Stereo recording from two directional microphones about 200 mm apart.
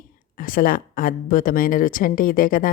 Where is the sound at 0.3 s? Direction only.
45° left (ahead or behind).